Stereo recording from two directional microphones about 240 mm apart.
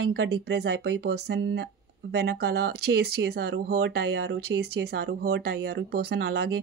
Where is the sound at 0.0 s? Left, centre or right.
Right.